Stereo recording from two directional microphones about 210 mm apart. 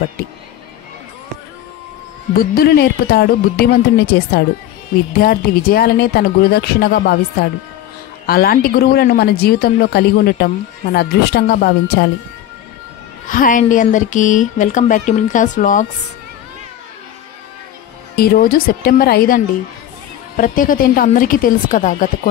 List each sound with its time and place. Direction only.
2.5 s speech: 50° left (ahead or behind)
13.3 s speech: 40° left (ahead or behind)
18.1 s speech: 45° left (ahead or behind)